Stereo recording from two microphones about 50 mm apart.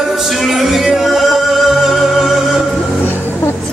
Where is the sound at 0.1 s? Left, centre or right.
Centre.